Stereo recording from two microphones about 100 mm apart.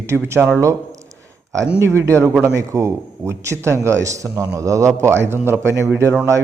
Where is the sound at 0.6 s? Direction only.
30° right (ahead or behind).